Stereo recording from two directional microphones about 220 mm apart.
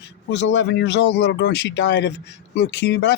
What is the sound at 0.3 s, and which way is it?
Speech, 50° left (ahead or behind).